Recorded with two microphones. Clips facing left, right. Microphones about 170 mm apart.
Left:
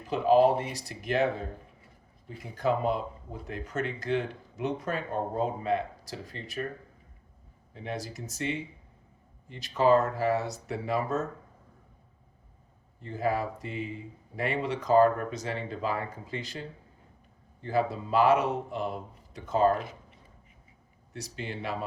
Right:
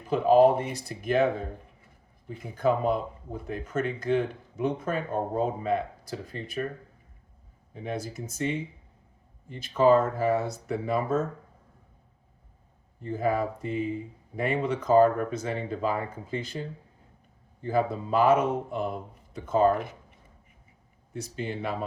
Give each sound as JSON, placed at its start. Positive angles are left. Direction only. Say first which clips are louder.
{"t": 0.1, "sound": "speech", "louder": "right 3 dB", "side_deg": -50}
{"t": 2.3, "sound": "speech", "louder": "right 3 dB", "side_deg": -50}
{"t": 7.9, "sound": "speech", "louder": "right 3 dB", "side_deg": -50}
{"t": 13.0, "sound": "speech", "louder": "right 3 dB", "side_deg": -50}
{"t": 17.7, "sound": "speech", "louder": "right 2 dB", "side_deg": -50}
{"t": 21.2, "sound": "speech", "louder": "right 4 dB", "side_deg": -50}